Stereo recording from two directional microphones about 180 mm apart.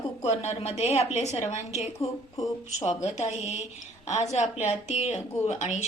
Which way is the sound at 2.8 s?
40° left (ahead or behind).